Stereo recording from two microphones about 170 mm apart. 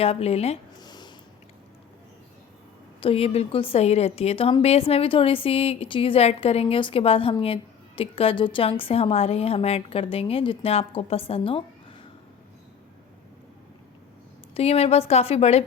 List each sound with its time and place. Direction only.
0.0 s a woman's voice: 35° left (ahead or behind)
0.8 s a sound: 25° left (ahead or behind)
3.0 s a woman's voice: 35° left (ahead or behind)
14.5 s a woman's voice: 35° left (ahead or behind)